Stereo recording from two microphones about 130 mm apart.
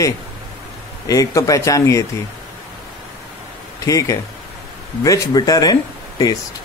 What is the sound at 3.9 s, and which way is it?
Speech, 25° left (ahead or behind).